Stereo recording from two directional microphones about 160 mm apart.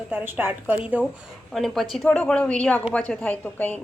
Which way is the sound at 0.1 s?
10° right (ahead or behind).